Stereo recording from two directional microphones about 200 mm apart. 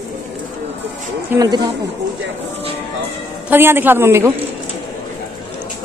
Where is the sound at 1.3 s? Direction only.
15° right (ahead or behind).